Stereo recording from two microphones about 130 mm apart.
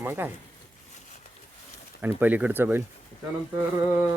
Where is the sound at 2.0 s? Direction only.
15° right (ahead or behind).